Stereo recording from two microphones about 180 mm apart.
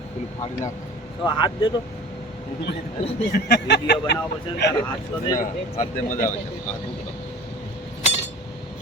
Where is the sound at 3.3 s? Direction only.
70° left (ahead or behind).